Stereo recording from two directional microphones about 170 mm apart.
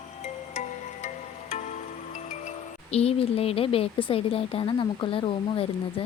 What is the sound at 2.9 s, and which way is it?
Speech, 35° left (ahead or behind).